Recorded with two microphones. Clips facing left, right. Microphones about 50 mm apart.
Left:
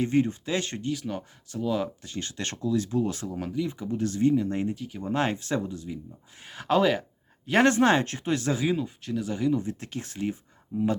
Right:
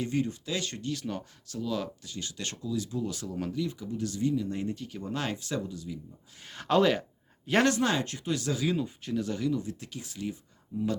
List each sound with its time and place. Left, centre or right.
0.0 s speech: left
0.9 s speech: centre
1.5 s speech: left
2.0 s speech: left
3.3 s speech: centre
3.6 s speech: left
3.9 s speech: left
4.7 s speech: centre
5.0 s speech: left
6.4 s speech: centre
7.6 s speech: left
8.8 s speech: centre
9.5 s speech: left